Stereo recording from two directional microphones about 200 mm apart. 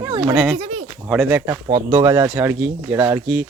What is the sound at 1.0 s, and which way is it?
Speech, 5° right (ahead or behind).